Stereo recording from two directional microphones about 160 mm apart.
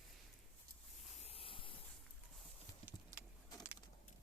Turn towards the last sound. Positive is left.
turn(degrees=-10)  # may be behind; listen again after turning